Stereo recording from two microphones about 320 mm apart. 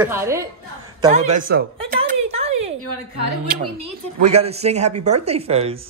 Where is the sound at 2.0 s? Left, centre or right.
Centre.